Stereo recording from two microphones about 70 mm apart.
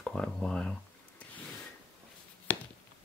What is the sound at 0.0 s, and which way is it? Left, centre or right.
Speech, centre.